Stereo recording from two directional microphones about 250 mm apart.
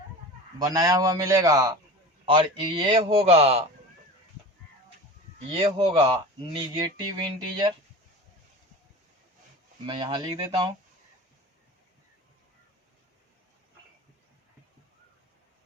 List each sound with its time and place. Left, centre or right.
0.6 s a man's voice: centre
5.5 s a man's voice: right
9.8 s a man's voice: centre